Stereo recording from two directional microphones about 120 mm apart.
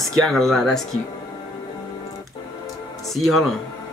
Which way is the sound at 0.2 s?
Centre (ahead or behind).